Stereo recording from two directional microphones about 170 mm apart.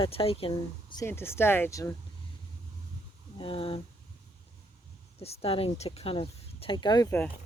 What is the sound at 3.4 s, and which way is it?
Speech, 30° left (ahead or behind).